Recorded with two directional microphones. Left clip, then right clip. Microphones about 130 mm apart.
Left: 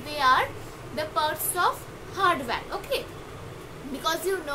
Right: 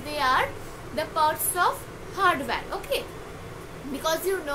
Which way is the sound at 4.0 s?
5° left (ahead or behind).